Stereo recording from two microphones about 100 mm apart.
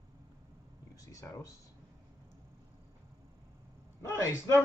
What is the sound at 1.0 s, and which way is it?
Speech, 35° left (ahead or behind).